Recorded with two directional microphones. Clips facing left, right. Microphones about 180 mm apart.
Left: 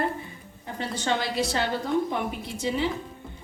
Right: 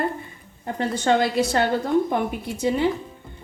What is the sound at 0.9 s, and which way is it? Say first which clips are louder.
Speech: right 7 dB; 50° right (ahead or behind).